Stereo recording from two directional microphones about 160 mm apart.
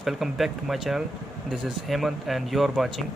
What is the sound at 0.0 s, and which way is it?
Speech, centre (ahead or behind).